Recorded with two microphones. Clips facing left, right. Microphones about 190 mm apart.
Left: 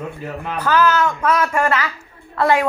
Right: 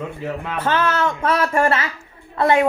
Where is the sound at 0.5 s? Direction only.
25° right (ahead or behind).